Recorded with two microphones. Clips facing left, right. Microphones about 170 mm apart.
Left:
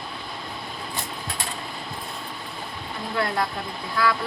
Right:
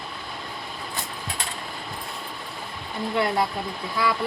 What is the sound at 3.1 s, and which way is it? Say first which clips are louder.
Speech: right 2 dB; 20° right (ahead or behind).